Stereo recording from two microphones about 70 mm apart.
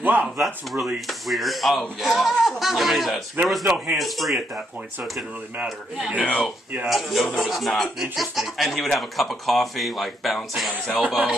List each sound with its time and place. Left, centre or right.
0.0 s speech: right
0.4 s speech: centre
3.4 s a man's voice: right
3.9 s speech: centre
5.6 s speech: centre
6.2 s speech: centre
6.9 s speech: centre
11.0 s speech: centre